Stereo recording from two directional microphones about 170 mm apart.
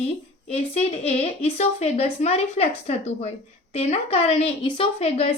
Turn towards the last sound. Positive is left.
turn(degrees=35)  # may be behind; listen again after turning